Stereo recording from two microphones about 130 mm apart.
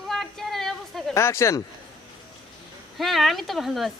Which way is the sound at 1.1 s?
20° left (ahead or behind).